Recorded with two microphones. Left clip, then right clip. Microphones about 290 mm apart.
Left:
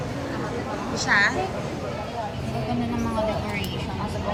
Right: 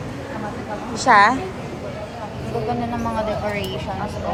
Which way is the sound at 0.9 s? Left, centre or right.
Centre.